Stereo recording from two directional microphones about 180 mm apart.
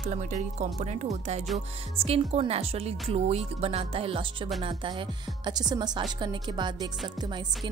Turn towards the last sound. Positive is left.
turn(degrees=-25)  # may be behind; listen again after turning